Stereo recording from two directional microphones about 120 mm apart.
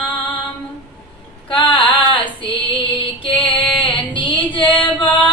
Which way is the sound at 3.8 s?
45° left (ahead or behind).